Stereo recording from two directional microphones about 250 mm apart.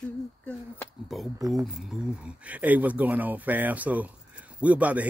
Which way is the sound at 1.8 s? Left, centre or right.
Centre.